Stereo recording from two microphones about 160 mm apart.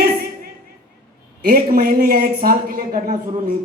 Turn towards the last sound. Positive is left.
turn(degrees=-60)  # may be behind; listen again after turning